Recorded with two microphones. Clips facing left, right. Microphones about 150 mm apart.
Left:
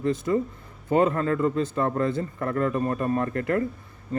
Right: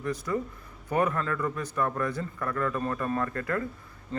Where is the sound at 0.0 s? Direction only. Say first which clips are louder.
Left 6 dB; 25° left (ahead or behind).